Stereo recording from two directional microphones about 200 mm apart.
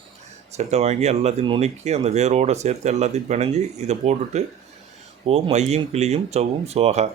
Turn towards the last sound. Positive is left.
turn(degrees=-35)  # may be behind; listen again after turning